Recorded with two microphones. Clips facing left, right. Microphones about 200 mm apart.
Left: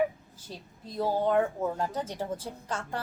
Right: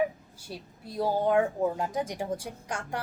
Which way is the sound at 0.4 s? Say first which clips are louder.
Right 2 dB; 10° right (ahead or behind).